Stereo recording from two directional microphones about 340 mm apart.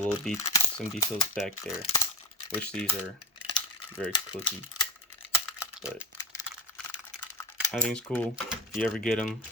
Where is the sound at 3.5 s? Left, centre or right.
Centre.